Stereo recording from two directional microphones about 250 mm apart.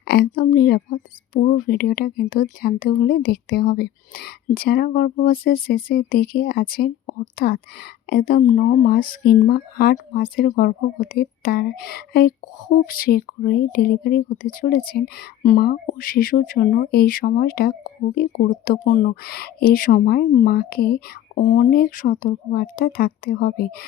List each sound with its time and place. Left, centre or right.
0.0 s speech: left